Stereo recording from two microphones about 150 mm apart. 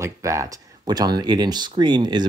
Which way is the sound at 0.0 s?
20° right (ahead or behind).